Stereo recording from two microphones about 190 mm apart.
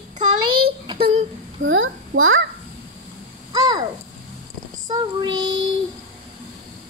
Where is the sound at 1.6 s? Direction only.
90° right.